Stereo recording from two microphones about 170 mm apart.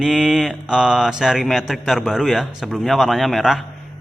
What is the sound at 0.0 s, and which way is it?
Speech, centre (ahead or behind).